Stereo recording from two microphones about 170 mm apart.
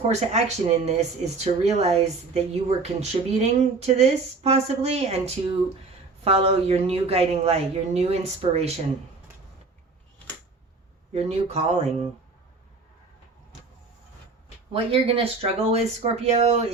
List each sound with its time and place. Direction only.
0.1 s speech: 40° right (ahead or behind)
11.1 s speech: 40° right (ahead or behind)
14.7 s speech: 35° right (ahead or behind)